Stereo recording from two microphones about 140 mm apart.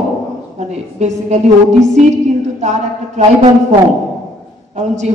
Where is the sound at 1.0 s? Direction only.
55° right (ahead or behind).